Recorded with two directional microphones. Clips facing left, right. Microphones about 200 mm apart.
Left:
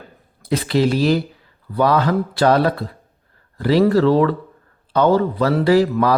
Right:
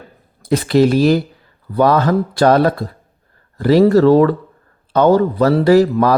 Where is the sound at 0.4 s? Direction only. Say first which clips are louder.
Right 5 dB; 45° right (ahead or behind).